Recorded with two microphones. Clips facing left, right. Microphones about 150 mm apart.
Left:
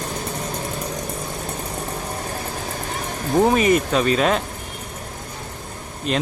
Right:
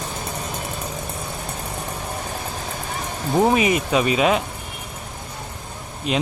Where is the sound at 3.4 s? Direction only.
5° right (ahead or behind).